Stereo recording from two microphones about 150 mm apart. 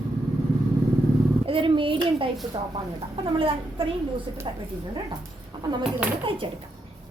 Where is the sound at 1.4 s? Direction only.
35° right (ahead or behind).